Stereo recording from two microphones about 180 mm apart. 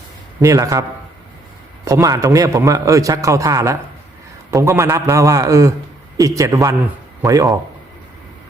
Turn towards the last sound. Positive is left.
turn(degrees=-20)  # may be behind; listen again after turning